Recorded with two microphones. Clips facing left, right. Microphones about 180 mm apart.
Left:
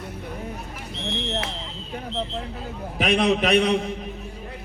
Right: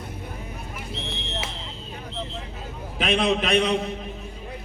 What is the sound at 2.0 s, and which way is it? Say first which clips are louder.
Vehicle: left 5 dB; 65° left (ahead or behind).